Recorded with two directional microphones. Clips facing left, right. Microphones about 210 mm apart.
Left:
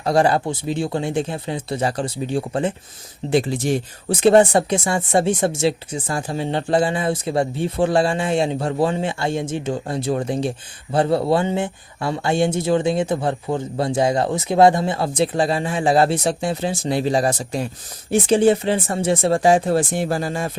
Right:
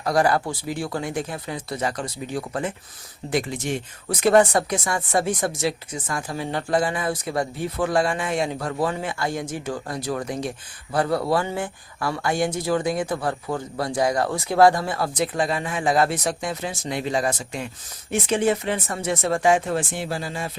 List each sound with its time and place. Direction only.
0.0 s speech: 25° left (ahead or behind); by 20.5 s 45° left (ahead or behind)